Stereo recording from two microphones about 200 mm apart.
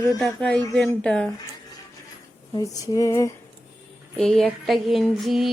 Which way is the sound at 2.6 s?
15° left (ahead or behind).